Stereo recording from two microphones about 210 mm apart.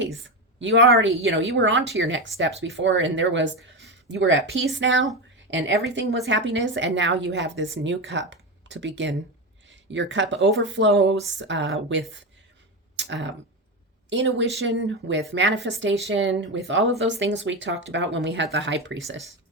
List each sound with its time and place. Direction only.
0.6 s a woman's voice: 60° right (ahead or behind)
13.0 s a sound: 60° right (ahead or behind)
14.1 s a woman's voice: 60° right (ahead or behind)